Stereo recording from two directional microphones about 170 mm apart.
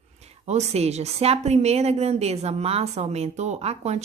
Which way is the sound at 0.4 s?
40° right (ahead or behind).